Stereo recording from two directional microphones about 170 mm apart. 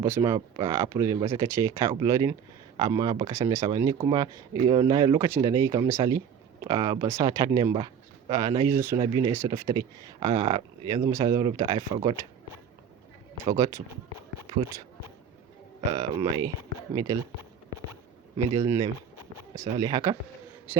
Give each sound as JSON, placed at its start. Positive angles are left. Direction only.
{"t": 0.0, "sound": "speech", "side_deg": -15}
{"t": 13.4, "sound": "speech", "side_deg": -20}
{"t": 15.9, "sound": "speech", "side_deg": -25}
{"t": 18.5, "sound": "speech", "side_deg": -20}
{"t": 20.7, "sound": "a sound", "side_deg": -10}